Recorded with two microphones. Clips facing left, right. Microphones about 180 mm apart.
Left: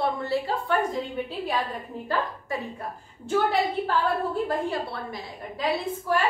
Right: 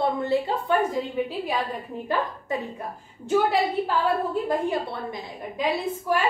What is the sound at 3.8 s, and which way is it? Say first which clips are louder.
A woman's voice: right 1 dB; 20° right (ahead or behind).